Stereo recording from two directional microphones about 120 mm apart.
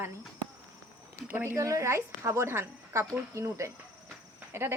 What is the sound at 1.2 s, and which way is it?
A woman's voice, 15° right (ahead or behind).